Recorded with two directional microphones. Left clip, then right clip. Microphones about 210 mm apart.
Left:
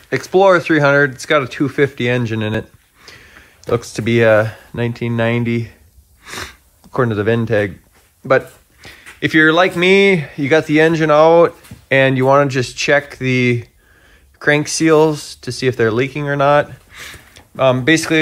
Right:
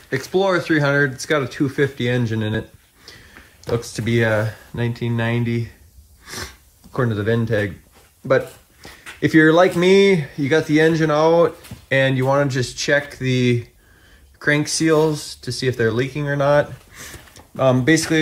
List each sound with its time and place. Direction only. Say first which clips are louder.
0.1 s speech: left 7 dB; 5° right (ahead or behind)
3.6 s speech: left 5 dB; centre (ahead or behind)
8.3 s a sound: left 4 dB; 5° right (ahead or behind)
9.2 s speech: left 2 dB; 15° right (ahead or behind)
17.3 s a sound: left 4 dB; 15° right (ahead or behind)
17.8 s speech: left 4 dB; 10° right (ahead or behind)